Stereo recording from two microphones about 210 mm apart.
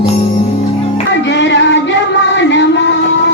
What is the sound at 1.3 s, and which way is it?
Child singing, 60° left (ahead or behind).